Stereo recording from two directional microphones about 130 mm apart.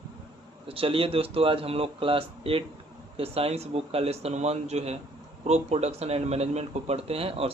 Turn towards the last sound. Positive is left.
turn(degrees=-50)  # may be behind; listen again after turning